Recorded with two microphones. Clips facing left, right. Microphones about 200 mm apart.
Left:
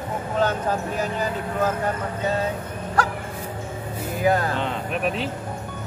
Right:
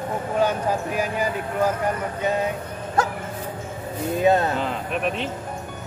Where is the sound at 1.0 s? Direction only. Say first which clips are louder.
Right 1 dB; 10° right (ahead or behind).